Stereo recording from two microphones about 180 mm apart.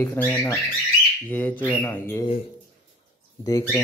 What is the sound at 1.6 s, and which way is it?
Speech, 10° left (ahead or behind).